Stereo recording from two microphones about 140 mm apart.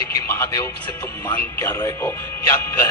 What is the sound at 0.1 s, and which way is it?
Speech, 25° left (ahead or behind).